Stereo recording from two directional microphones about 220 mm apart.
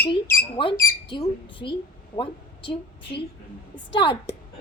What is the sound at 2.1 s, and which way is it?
Speech, 20° left (ahead or behind).